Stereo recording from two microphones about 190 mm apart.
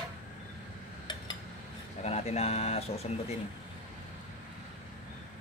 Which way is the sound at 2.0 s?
35° left (ahead or behind).